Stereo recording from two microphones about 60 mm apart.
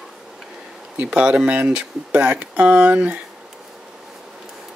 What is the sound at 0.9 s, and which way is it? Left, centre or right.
Speech, right.